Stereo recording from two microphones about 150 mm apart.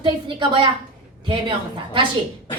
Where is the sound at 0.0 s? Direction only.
35° right (ahead or behind).